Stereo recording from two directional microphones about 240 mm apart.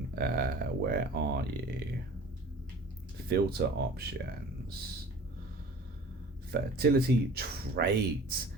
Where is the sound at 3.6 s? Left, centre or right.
Right.